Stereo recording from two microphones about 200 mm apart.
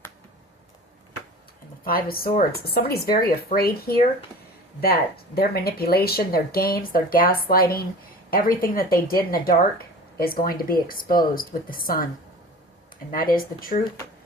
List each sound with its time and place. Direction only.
1.8 s speech: 45° left (ahead or behind)
13.1 s speech: 45° left (ahead or behind)